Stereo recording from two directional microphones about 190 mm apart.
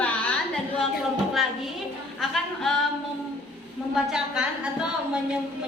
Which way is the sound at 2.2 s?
Centre (ahead or behind).